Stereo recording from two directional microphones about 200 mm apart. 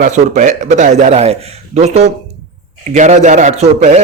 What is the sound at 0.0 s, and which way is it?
A man's voice, 40° right (ahead or behind).